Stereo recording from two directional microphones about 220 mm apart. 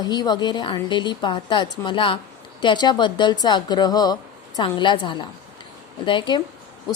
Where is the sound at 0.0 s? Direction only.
20° left (ahead or behind).